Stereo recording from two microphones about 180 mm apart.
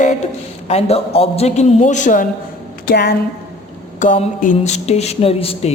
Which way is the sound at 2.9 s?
65° left (ahead or behind).